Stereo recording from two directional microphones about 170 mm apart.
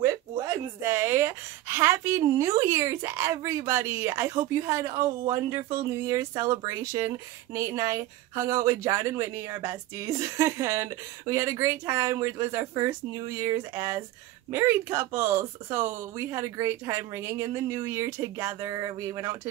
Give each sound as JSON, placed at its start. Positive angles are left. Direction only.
{"t": 0.0, "sound": "speech", "side_deg": -15}